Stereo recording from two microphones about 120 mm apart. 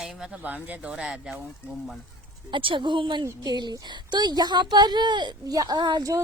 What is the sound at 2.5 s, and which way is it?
Speech, 45° right (ahead or behind).